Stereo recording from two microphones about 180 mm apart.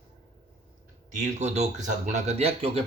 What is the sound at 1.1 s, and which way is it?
Speech, 40° right (ahead or behind).